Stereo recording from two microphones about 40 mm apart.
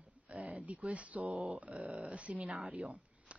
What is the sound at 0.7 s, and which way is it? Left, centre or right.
Speech, right.